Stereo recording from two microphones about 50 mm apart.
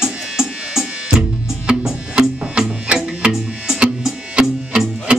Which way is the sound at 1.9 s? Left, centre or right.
Centre.